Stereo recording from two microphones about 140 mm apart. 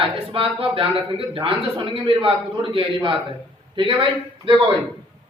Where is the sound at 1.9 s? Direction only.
40° right (ahead or behind).